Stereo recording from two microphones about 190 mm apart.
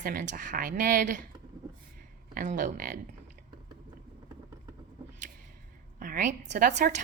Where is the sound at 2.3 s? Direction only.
45° right (ahead or behind).